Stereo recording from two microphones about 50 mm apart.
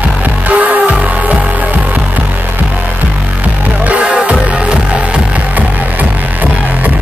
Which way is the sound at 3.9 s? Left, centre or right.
Right.